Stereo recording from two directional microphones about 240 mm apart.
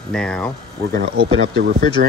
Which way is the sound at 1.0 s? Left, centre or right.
Right.